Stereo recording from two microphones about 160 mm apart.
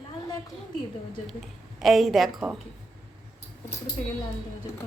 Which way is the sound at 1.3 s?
Centre (ahead or behind).